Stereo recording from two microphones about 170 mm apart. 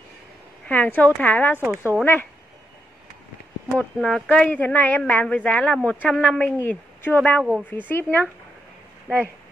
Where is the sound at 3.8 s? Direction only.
5° left (ahead or behind).